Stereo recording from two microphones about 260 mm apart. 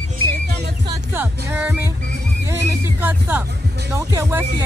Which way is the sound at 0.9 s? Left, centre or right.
Centre.